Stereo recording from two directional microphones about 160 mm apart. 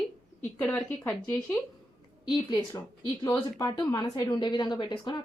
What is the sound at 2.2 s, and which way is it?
A woman's voice, 25° left (ahead or behind).